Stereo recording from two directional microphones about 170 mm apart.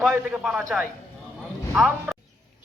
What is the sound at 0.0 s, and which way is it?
Speech, centre (ahead or behind).